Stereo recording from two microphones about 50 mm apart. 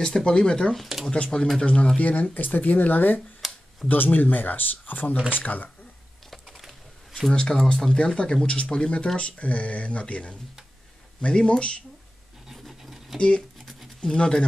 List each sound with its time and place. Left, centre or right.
0.0 s speech: centre
0.7 s speech: centre
1.3 s speech: centre
2.0 s speech: left
3.4 s a sound: centre
3.9 s speech: left
6.3 s typing: centre
7.4 s speech: centre
12.4 s a sound: centre
14.0 s speech: centre